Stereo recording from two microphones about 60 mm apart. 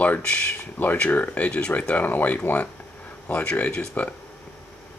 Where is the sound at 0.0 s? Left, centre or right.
Left.